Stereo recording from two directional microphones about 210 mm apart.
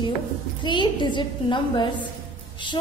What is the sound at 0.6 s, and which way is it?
A woman's voice, 20° left (ahead or behind).